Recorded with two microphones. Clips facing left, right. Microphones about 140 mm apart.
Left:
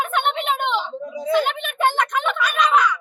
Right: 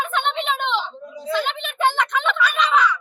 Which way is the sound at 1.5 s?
50° left (ahead or behind).